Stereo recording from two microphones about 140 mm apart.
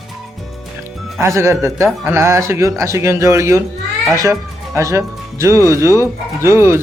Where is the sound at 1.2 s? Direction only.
20° right (ahead or behind).